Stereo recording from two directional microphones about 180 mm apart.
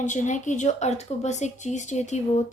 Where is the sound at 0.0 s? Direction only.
45° left (ahead or behind).